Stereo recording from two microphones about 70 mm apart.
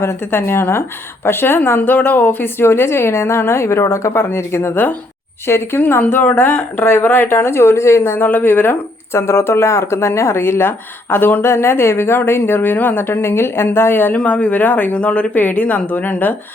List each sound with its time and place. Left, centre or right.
0.0 s a woman's voice: left
9.1 s a woman's voice: left
11.4 s a woman's voice: left
14.2 s speech: centre